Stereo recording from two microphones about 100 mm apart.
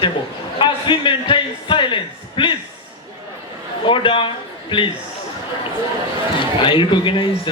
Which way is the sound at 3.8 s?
60° left (ahead or behind).